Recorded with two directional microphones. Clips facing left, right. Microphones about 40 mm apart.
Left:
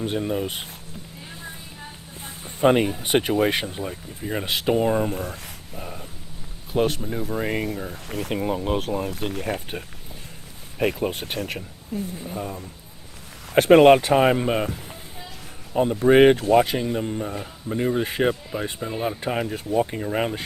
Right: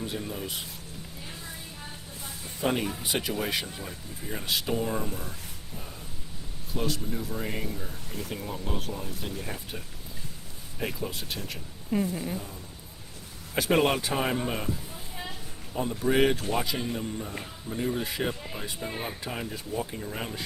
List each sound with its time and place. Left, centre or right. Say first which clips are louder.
0.0 s speech: left 9 dB; left
2.2 s speech: left 11 dB; left
5.1 s a sound: left 7 dB; left
6.7 s speech: left 8 dB; left
8.0 s speech: left 9 dB; left
8.4 s speech: left 13 dB; left
11.9 s a woman's voice: right 2 dB; right
12.3 s speech: left 5 dB; left
14.3 s speech: left 9 dB; left
15.7 s speech: left 9 dB; left
16.9 s speech: left 7 dB; left
18.8 s speech: left 6 dB; centre
19.2 s speech: left 9 dB; left